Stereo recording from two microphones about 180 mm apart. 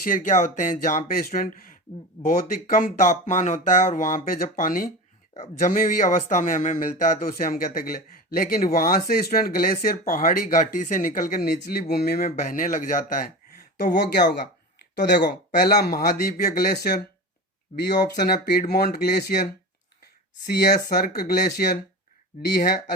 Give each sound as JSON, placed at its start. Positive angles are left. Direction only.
{"t": 0.1, "sound": "speech", "side_deg": 45}
{"t": 13.7, "sound": "speech", "side_deg": 65}
{"t": 17.7, "sound": "speech", "side_deg": 35}
{"t": 18.1, "sound": "speech", "side_deg": 65}
{"t": 20.5, "sound": "speech", "side_deg": 60}